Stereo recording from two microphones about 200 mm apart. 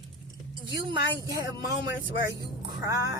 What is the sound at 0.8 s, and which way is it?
Speech, 25° right (ahead or behind).